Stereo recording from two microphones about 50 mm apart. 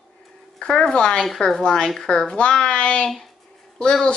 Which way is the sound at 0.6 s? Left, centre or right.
Centre.